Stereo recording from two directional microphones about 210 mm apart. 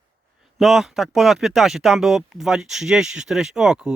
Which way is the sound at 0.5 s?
Centre (ahead or behind).